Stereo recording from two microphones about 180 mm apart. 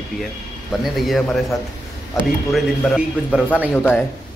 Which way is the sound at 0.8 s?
Centre (ahead or behind).